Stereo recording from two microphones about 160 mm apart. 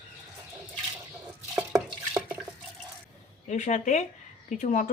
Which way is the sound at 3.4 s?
45° left (ahead or behind).